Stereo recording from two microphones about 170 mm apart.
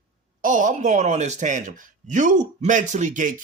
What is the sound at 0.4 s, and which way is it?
Speech, 50° right (ahead or behind).